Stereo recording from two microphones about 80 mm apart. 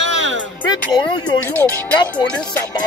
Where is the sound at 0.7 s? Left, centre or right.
Left.